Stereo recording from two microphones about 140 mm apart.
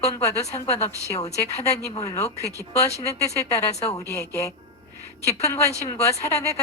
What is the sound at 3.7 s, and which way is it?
Speech, 50° left (ahead or behind).